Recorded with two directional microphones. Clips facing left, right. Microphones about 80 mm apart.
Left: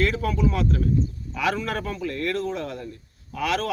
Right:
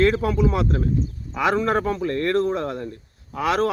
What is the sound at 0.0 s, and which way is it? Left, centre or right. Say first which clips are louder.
Speech: right 4 dB; right.